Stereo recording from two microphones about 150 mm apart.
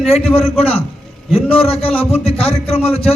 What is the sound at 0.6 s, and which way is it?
A man's voice, 40° left (ahead or behind).